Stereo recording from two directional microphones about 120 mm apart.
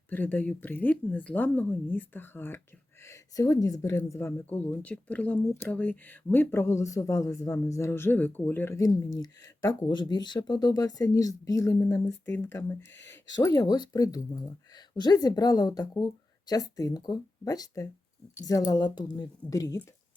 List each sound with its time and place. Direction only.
0.1 s speech: 15° left (ahead or behind)
9.8 s speech: 35° left (ahead or behind); by 13.1 s 20° left (ahead or behind)
13.3 s speech: 30° left (ahead or behind)